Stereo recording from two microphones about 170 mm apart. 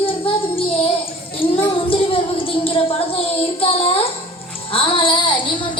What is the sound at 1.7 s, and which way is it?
Child singing, 30° left (ahead or behind).